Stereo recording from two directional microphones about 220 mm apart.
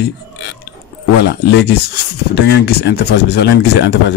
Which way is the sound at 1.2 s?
50° left (ahead or behind).